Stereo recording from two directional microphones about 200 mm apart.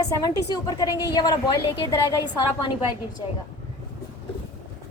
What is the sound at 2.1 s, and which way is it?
Speech, 20° left (ahead or behind).